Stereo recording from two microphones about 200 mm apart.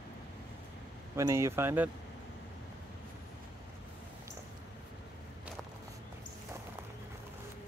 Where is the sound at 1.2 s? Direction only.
15° right (ahead or behind).